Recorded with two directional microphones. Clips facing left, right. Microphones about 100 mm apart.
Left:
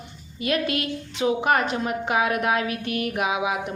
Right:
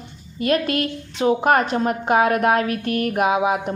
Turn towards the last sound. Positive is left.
turn(degrees=-45)  # may be behind; listen again after turning